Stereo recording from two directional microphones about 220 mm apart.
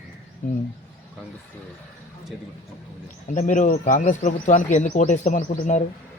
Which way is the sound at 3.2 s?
35° left (ahead or behind).